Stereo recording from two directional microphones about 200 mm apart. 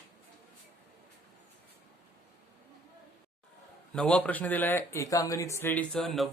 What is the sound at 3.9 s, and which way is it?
A man's voice, 5° left (ahead or behind).